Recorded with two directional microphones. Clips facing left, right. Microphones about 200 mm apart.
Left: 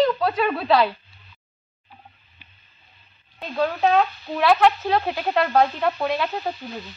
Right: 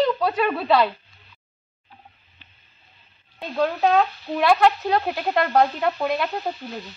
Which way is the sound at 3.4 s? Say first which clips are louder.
Even; centre (ahead or behind).